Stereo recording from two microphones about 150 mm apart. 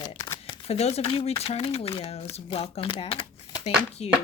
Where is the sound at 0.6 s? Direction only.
45° left (ahead or behind).